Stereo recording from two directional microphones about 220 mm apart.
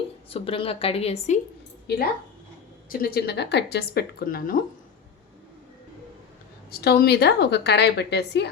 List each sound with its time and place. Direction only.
0.3 s a woman's voice: 25° left (ahead or behind)
2.9 s a woman's voice: 40° left (ahead or behind)
6.7 s a woman's voice: 45° left (ahead or behind)